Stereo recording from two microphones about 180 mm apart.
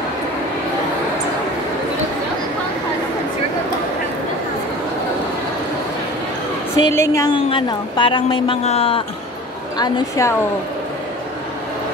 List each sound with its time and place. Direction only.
6.8 s a woman's voice: 15° left (ahead or behind)
7.3 s speech: 30° left (ahead or behind)
9.8 s speech: 20° left (ahead or behind)